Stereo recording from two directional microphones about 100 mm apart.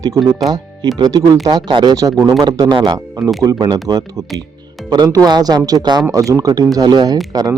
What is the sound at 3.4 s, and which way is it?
Speech, 40° right (ahead or behind).